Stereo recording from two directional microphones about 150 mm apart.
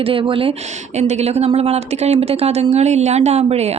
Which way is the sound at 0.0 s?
35° right (ahead or behind).